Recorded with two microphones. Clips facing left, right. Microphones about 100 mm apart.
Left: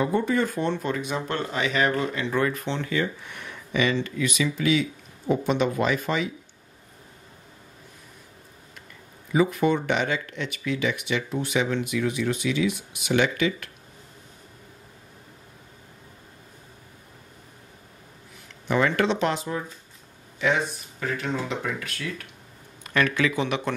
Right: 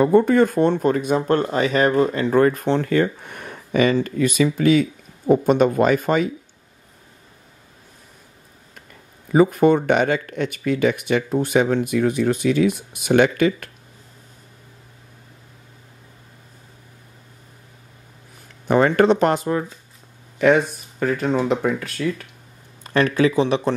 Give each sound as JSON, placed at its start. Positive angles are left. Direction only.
{"t": 0.0, "sound": "speech", "side_deg": -55}
{"t": 9.3, "sound": "speech", "side_deg": -45}
{"t": 18.7, "sound": "speech", "side_deg": -40}